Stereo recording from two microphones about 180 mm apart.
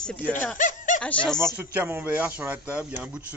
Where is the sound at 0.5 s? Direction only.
45° left (ahead or behind).